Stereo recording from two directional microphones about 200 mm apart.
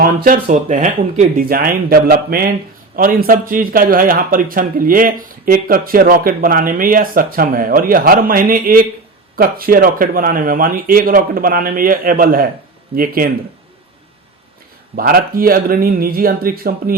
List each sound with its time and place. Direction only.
0.0 s speech: 45° right (ahead or behind)
14.9 s speech: 45° right (ahead or behind)